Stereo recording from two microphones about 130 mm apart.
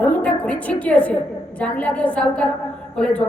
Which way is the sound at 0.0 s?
10° left (ahead or behind).